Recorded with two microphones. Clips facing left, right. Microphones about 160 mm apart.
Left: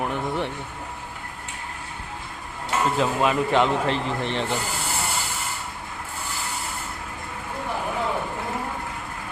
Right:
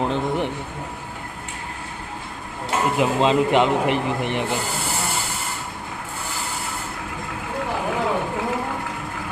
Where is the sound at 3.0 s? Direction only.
20° right (ahead or behind).